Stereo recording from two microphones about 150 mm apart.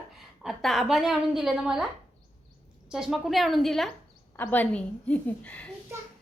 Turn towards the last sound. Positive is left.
turn(degrees=10)  # may be behind; listen again after turning